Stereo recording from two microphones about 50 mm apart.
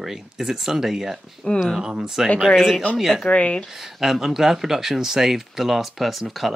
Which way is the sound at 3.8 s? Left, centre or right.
Centre.